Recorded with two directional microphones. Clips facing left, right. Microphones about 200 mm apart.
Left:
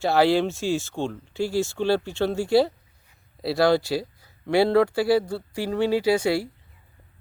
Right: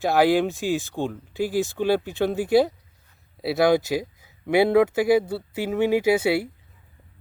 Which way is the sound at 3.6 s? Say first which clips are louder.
Right 1 dB; 20° right (ahead or behind).